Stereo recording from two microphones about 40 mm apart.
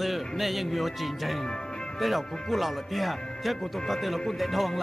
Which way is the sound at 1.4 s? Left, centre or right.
Centre.